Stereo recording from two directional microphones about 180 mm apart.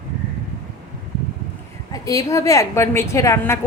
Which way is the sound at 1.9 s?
20° left (ahead or behind).